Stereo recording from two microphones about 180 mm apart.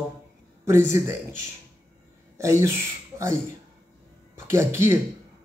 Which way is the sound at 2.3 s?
15° right (ahead or behind).